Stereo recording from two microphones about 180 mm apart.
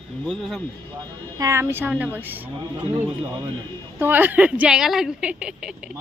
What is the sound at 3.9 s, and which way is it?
Speech, 10° right (ahead or behind).